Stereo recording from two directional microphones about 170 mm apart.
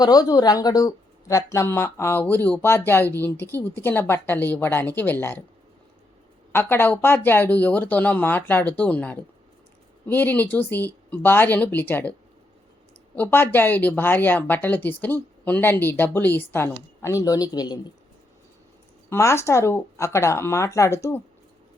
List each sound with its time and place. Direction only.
0.0 s speech: 20° left (ahead or behind)
6.5 s speech: 10° left (ahead or behind)
13.1 s speech: 10° left (ahead or behind)
19.1 s speech: 15° left (ahead or behind)